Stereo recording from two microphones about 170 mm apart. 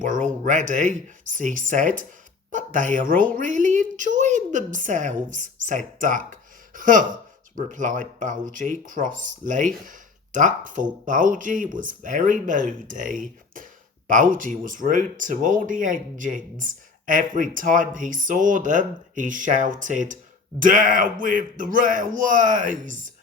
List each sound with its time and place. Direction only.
0.4 s a woman's voice: 50° right (ahead or behind)